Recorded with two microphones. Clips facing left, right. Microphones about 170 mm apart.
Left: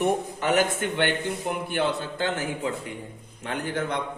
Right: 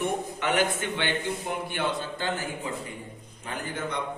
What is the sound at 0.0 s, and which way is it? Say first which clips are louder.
A man's voice: left 4 dB; 40° left (ahead or behind).